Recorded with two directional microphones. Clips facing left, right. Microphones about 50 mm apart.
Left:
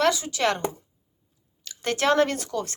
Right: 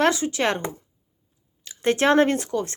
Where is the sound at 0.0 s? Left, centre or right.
Right.